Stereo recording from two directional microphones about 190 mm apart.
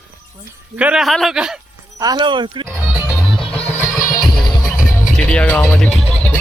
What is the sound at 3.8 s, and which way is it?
Music, 15° left (ahead or behind).